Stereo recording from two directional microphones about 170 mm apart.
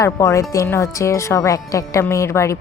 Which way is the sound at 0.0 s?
20° left (ahead or behind).